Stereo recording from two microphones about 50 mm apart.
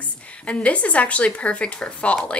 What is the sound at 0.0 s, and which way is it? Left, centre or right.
A woman's voice, left.